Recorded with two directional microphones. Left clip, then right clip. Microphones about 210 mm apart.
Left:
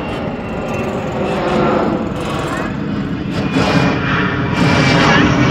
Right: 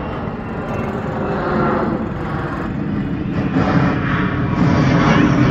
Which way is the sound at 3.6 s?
45° left (ahead or behind).